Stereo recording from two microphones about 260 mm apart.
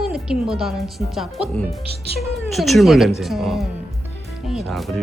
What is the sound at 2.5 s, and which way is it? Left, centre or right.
Speech, centre.